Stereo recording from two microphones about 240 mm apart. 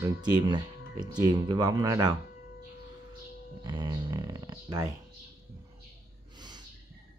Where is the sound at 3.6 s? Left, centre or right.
Centre.